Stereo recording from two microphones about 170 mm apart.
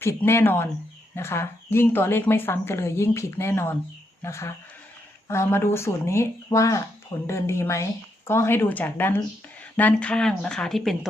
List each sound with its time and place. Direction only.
0.0 s speech: 15° left (ahead or behind)